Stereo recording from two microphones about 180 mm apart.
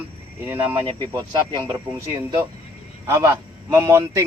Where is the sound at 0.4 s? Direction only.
10° right (ahead or behind).